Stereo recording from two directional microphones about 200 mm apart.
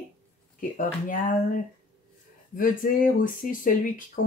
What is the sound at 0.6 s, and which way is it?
Speech, 40° left (ahead or behind).